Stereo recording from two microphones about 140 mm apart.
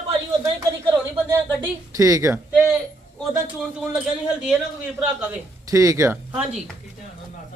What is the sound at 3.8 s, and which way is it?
Speech, 5° right (ahead or behind).